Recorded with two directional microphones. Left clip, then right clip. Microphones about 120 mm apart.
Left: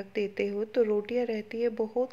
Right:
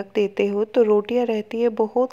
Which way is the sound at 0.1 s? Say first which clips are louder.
Right 10 dB; 40° right (ahead or behind).